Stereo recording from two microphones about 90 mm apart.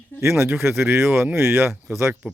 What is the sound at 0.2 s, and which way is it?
Speech, 30° right (ahead or behind).